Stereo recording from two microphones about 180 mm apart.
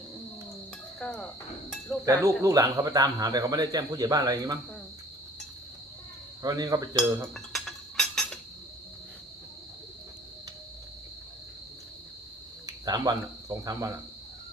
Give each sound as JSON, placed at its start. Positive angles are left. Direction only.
{"t": 0.9, "sound": "insect", "side_deg": 5}
{"t": 2.0, "sound": "speech", "side_deg": -15}
{"t": 6.4, "sound": "speech", "side_deg": -20}
{"t": 7.3, "sound": "chink", "side_deg": 0}
{"t": 12.6, "sound": "speech", "side_deg": -20}